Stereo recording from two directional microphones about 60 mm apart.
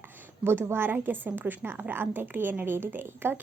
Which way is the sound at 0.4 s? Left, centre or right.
Right.